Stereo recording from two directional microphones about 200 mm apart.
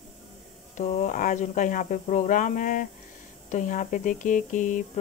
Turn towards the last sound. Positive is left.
turn(degrees=40)  # may be behind; listen again after turning